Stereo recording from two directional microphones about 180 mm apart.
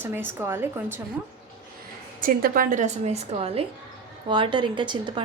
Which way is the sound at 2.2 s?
50° right (ahead or behind).